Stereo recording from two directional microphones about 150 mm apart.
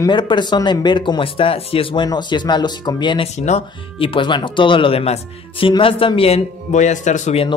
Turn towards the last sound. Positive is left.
turn(degrees=50)  # may be behind; listen again after turning